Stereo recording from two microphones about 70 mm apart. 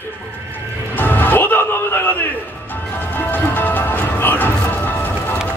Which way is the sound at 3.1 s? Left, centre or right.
Left.